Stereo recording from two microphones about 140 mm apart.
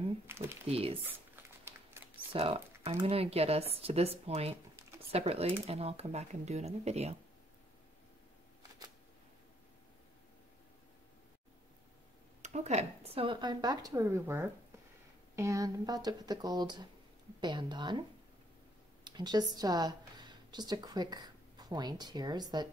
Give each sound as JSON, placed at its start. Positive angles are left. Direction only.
{"t": 0.3, "sound": "a sound", "side_deg": -20}
{"t": 0.7, "sound": "speech", "side_deg": -45}
{"t": 2.3, "sound": "speech", "side_deg": -45}
{"t": 12.4, "sound": "speech", "side_deg": -55}
{"t": 19.0, "sound": "a woman's voice", "side_deg": -30}